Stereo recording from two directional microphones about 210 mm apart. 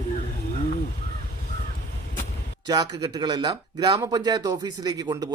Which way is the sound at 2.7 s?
20° right (ahead or behind).